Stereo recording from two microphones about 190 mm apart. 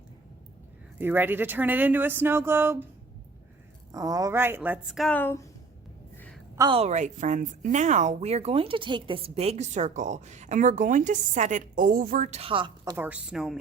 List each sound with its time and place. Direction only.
0.9 s speech: 10° right (ahead or behind)
3.9 s speech: 20° right (ahead or behind); by 5.5 s 10° left (ahead or behind)
6.6 s speech: 30° right (ahead or behind)
12.8 s speech: 15° right (ahead or behind)